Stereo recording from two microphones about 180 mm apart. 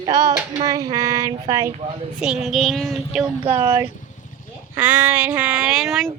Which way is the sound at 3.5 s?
15° right (ahead or behind).